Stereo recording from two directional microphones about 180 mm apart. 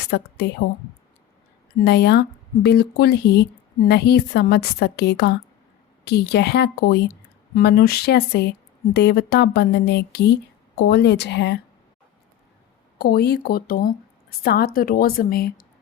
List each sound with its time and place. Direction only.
0.1 s a woman's voice: 70° left (ahead or behind)
1.8 s a woman's voice: 65° left (ahead or behind)
13.0 s speech: 60° left (ahead or behind)